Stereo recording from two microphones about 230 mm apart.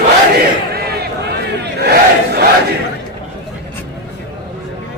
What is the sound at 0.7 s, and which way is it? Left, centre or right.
Battle cry, right.